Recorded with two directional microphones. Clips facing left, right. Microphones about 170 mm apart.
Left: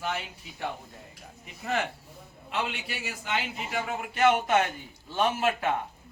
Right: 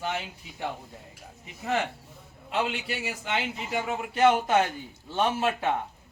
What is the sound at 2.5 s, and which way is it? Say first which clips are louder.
A man's voice: right 4 dB; 30° right (ahead or behind).